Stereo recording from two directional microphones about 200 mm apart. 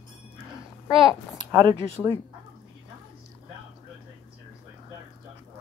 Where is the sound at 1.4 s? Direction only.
20° right (ahead or behind).